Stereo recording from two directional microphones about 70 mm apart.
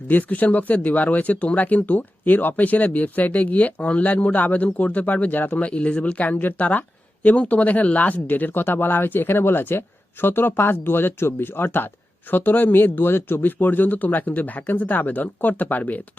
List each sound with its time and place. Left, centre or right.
0.1 s speech: left